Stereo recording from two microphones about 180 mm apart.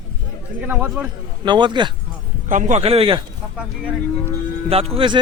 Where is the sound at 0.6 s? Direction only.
10° right (ahead or behind).